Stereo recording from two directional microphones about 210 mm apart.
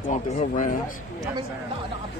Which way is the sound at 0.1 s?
35° left (ahead or behind).